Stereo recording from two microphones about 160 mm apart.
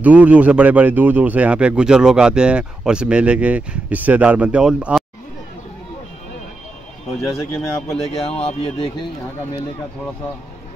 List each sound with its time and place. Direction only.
0.0 s speech: 10° right (ahead or behind)
7.1 s a man's voice: centre (ahead or behind)
8.3 s speech: 40° left (ahead or behind)